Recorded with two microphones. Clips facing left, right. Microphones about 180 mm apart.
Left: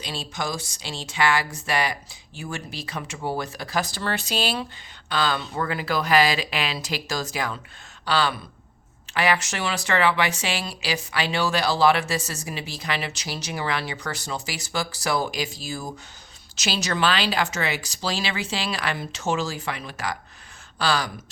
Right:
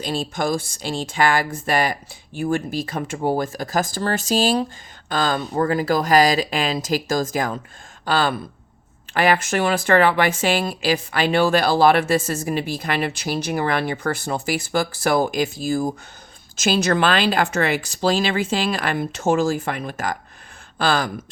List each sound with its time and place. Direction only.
0.0 s a woman's voice: 50° right (ahead or behind)